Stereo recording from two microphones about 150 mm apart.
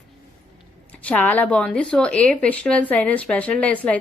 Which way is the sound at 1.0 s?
10° left (ahead or behind).